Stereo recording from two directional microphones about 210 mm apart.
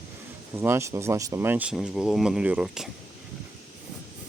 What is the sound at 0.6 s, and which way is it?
Speech, 15° right (ahead or behind).